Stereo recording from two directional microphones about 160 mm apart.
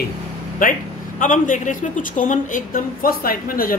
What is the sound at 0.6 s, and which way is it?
A woman's voice, 60° left (ahead or behind).